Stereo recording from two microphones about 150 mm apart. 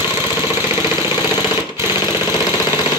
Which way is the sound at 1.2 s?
25° left (ahead or behind).